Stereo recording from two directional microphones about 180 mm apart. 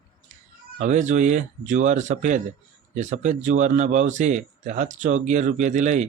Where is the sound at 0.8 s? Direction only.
40° right (ahead or behind).